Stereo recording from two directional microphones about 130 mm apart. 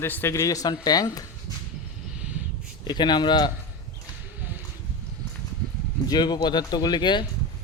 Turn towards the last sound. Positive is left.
turn(degrees=35)  # may be behind; listen again after turning